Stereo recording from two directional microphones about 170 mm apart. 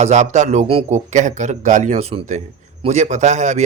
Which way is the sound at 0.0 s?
45° right (ahead or behind).